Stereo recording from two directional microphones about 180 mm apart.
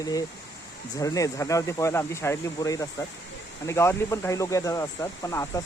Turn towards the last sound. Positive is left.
turn(degrees=15)  # may be behind; listen again after turning